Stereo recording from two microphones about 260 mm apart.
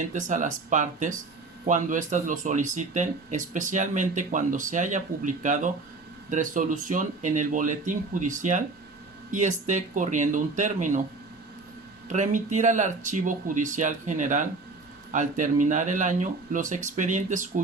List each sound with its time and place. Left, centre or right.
0.1 s speech: right
12.0 s speech: right